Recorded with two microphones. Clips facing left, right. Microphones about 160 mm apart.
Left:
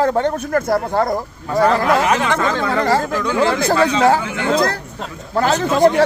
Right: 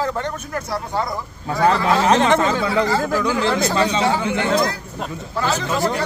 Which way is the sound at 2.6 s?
50° left (ahead or behind).